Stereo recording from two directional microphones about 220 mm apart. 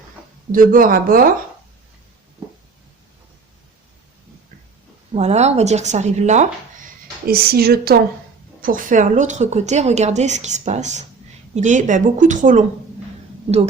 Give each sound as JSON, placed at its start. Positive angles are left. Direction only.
{"t": 0.5, "sound": "a woman's voice", "side_deg": -40}
{"t": 5.1, "sound": "a woman's voice", "side_deg": -30}
{"t": 7.3, "sound": "a woman's voice", "side_deg": -45}